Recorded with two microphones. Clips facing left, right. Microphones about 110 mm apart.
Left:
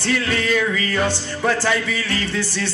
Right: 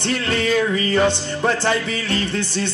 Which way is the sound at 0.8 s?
20° right (ahead or behind).